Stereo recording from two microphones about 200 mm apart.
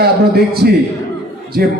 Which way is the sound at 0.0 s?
50° right (ahead or behind).